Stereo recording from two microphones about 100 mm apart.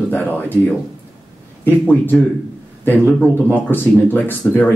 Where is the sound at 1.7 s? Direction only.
20° left (ahead or behind).